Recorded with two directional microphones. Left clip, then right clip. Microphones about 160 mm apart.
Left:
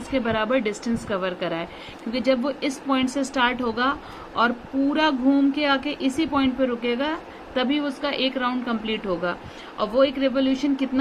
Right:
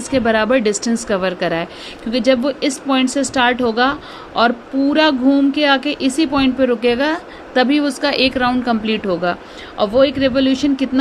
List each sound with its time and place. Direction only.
0.1 s speech: 40° right (ahead or behind)
4.9 s speech: 30° right (ahead or behind)